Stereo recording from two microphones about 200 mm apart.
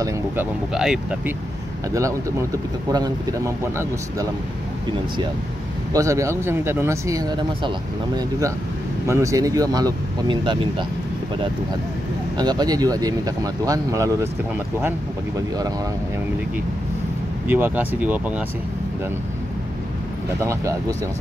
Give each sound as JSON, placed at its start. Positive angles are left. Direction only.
{"t": 0.7, "sound": "speech", "side_deg": -5}
{"t": 2.0, "sound": "speech", "side_deg": -15}
{"t": 5.9, "sound": "speech", "side_deg": -15}
{"t": 12.4, "sound": "speech", "side_deg": -20}
{"t": 17.5, "sound": "speech", "side_deg": -10}
{"t": 20.3, "sound": "speech", "side_deg": -15}